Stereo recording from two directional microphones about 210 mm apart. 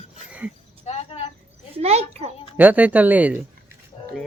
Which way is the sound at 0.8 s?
30° left (ahead or behind).